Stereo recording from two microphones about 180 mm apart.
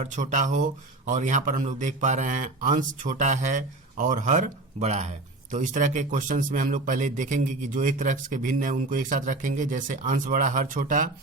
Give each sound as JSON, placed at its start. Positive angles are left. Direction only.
{"t": 0.0, "sound": "speech", "side_deg": -45}